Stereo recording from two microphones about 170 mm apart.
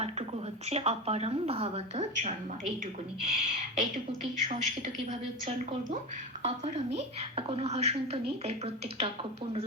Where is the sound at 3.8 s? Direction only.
50° right (ahead or behind).